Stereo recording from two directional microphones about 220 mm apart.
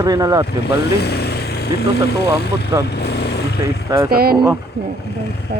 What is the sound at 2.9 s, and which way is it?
Vehicle, 50° left (ahead or behind).